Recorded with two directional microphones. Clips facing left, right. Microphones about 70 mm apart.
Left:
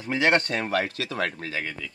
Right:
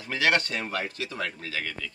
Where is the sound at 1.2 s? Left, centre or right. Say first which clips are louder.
Left 4 dB; left.